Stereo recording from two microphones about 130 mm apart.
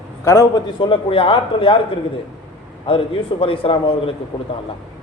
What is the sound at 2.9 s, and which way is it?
Speech, 45° left (ahead or behind).